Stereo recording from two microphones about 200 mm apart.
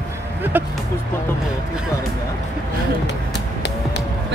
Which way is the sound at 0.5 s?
10° right (ahead or behind).